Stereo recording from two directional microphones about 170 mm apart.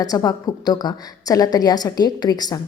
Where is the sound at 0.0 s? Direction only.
20° left (ahead or behind).